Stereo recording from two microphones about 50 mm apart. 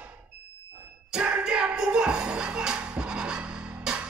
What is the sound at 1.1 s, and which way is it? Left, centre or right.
Music, centre.